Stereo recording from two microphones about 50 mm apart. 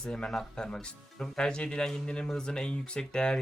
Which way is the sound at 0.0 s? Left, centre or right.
Centre.